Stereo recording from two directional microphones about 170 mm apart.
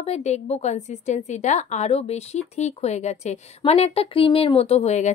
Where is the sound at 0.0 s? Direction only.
40° left (ahead or behind).